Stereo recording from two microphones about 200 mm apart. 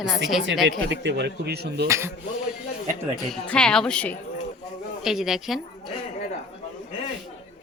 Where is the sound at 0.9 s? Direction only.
60° right (ahead or behind).